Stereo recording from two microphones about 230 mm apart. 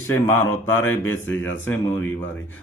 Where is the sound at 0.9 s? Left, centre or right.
Left.